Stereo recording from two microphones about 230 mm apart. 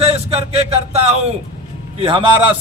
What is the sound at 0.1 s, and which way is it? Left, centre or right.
Speech, right.